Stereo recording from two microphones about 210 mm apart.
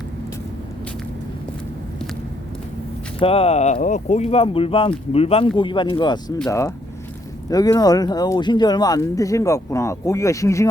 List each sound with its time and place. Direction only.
3.2 s speech: 30° left (ahead or behind)